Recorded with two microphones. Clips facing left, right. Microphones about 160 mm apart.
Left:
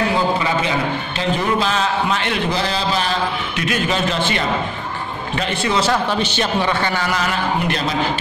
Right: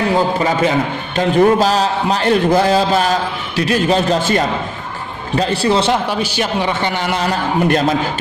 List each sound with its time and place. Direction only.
1.1 s a man's voice: 45° right (ahead or behind)
6.0 s a man's voice: 10° right (ahead or behind); by 7.3 s 30° right (ahead or behind)
7.6 s a man's voice: 50° right (ahead or behind)